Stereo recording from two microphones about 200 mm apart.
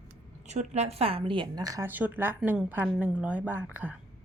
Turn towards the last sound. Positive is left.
turn(degrees=-10)  # may be behind; listen again after turning